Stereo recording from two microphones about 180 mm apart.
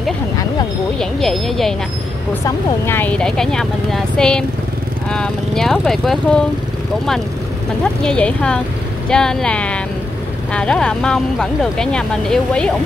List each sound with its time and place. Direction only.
0.9 s speech: centre (ahead or behind)
2.4 s speech: 10° left (ahead or behind)
7.8 s speech: 5° left (ahead or behind)